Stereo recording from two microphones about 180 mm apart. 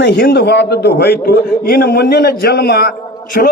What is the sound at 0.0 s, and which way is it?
A man's voice, 65° left (ahead or behind).